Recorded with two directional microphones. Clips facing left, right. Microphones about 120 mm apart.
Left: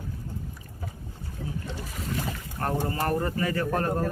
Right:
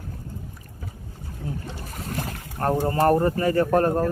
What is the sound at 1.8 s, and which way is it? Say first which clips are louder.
Speech: right 1 dB; 50° right (ahead or behind).